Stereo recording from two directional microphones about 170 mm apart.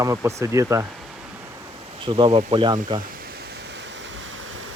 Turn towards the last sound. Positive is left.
turn(degrees=-30)  # may be behind; listen again after turning